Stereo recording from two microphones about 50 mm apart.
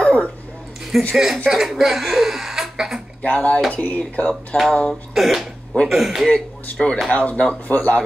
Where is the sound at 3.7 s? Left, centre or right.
Left.